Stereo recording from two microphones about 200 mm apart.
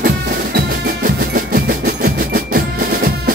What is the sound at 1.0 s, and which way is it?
Music, 45° right (ahead or behind).